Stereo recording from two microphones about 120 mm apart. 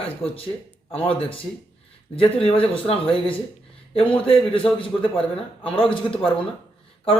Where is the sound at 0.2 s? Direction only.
50° left (ahead or behind).